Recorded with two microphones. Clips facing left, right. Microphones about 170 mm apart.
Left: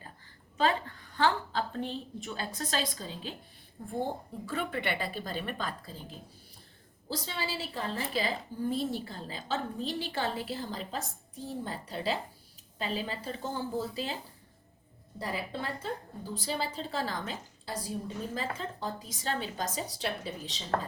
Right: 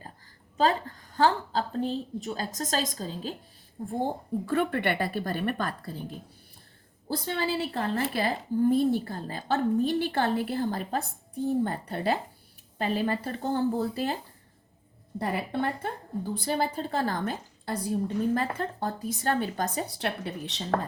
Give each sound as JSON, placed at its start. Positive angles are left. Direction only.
{"t": 0.5, "sound": "a woman's voice", "side_deg": -40}
{"t": 4.4, "sound": "a woman's voice", "side_deg": -55}
{"t": 7.1, "sound": "a woman's voice", "side_deg": -55}
{"t": 15.2, "sound": "a woman's voice", "side_deg": -60}